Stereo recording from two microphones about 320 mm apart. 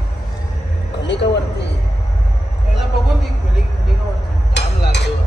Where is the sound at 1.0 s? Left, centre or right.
Left.